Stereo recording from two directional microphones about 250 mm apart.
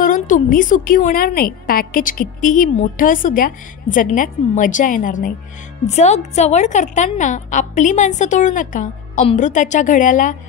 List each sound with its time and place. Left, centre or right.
0.0 s a woman's voice: left